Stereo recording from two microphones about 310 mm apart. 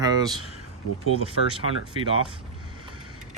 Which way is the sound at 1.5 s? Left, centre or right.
Centre.